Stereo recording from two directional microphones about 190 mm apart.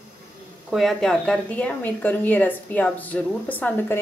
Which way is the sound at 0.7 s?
Centre (ahead or behind).